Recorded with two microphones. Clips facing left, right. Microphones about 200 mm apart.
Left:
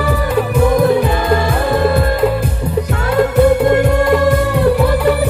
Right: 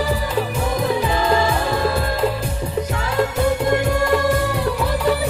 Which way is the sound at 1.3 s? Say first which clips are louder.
Left 6 dB; 60° left (ahead or behind).